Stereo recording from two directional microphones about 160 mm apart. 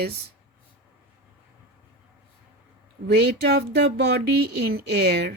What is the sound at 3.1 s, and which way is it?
Speech, 90° right.